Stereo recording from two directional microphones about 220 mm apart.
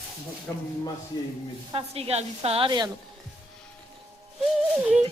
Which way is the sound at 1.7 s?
25° right (ahead or behind).